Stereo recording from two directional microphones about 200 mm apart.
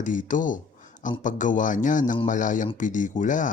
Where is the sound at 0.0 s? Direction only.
40° left (ahead or behind).